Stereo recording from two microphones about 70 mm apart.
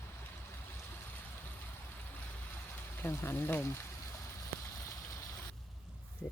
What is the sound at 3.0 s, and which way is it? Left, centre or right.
Speech, left.